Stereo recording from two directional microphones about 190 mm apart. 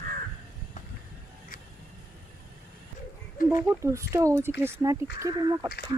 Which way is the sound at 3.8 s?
15° right (ahead or behind).